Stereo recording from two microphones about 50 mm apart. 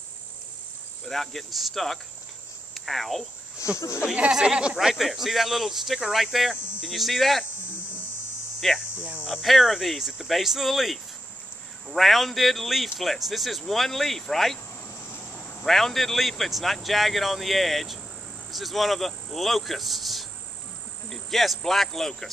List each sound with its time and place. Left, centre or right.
1.0 s a man's voice: centre
3.7 s speech: left
4.3 s speech: centre
4.7 s a man's voice: centre
8.9 s cricket: right
9.2 s a man's voice: centre
15.0 s vehicle: left
15.6 s a man's voice: centre